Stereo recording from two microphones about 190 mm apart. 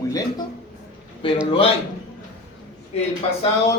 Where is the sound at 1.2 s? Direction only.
30° left (ahead or behind).